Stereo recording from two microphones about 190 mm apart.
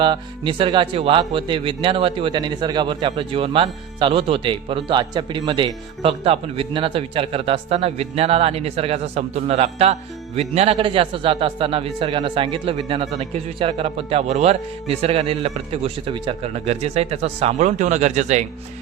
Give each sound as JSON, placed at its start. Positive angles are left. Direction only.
{"t": 0.0, "sound": "speech", "side_deg": -25}